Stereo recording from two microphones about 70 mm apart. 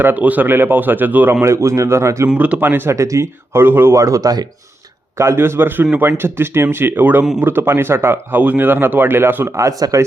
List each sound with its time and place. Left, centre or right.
0.0 s speech: right
2.4 s speech: right
2.9 s a man's voice: right
3.9 s speech: right
5.1 s a man's voice: right
9.6 s speech: right